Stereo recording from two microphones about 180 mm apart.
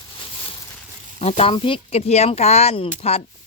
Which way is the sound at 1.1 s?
35° left (ahead or behind).